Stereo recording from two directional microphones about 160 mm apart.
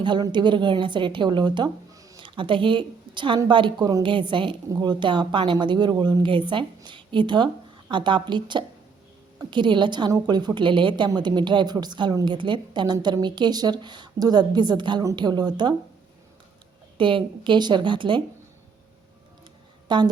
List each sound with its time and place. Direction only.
0.0 s a woman's voice: 30° right (ahead or behind)
17.0 s a woman's voice: 30° right (ahead or behind)
19.9 s a woman's voice: 30° right (ahead or behind)